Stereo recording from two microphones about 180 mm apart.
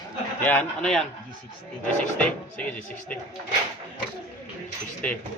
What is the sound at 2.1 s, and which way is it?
Speech, 5° left (ahead or behind).